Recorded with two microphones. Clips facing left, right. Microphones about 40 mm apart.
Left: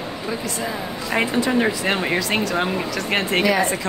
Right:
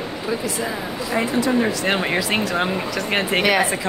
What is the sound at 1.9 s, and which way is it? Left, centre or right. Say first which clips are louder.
A woman's voice: right 1 dB; centre.